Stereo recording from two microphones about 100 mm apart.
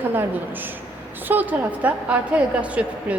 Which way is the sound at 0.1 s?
20° right (ahead or behind).